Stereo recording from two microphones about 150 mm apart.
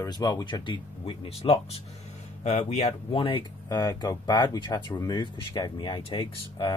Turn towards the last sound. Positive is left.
turn(degrees=30)  # may be behind; listen again after turning